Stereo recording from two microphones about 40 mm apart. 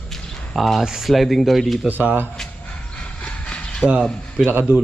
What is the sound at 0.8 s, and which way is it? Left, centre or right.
Speech, centre.